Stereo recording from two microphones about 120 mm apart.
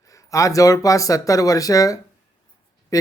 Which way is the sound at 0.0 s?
25° left (ahead or behind).